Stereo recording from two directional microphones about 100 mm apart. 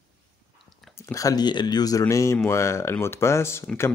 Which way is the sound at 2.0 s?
30° left (ahead or behind).